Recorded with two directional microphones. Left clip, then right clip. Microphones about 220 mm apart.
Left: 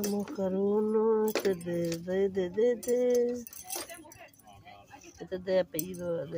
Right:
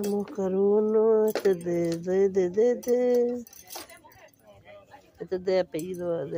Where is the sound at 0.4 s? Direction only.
35° right (ahead or behind).